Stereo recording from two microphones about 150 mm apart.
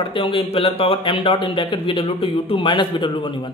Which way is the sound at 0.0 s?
35° left (ahead or behind).